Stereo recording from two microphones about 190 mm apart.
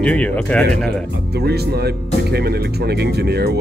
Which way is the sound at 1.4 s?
60° right (ahead or behind).